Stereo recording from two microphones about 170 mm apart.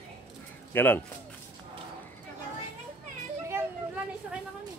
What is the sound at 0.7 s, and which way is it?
Speech, 10° left (ahead or behind).